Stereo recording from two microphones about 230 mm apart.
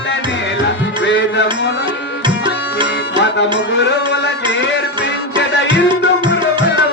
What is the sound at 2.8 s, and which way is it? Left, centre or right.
Music, right.